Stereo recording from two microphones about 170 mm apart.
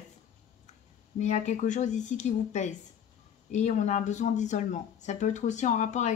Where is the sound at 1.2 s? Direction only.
45° left (ahead or behind).